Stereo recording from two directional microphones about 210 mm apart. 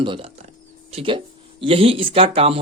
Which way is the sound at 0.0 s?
25° right (ahead or behind).